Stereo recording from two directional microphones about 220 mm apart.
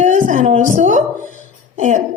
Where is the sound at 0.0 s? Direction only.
35° right (ahead or behind).